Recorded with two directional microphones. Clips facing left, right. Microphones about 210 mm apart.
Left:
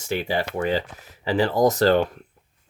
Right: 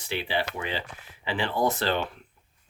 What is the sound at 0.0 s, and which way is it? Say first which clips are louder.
Speech: left 5 dB; 45° left (ahead or behind).